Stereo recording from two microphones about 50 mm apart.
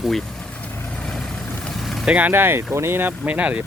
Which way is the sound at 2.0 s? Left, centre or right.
Right.